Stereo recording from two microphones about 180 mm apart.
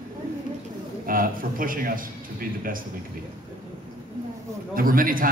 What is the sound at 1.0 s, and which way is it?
A man's voice, 50° right (ahead or behind).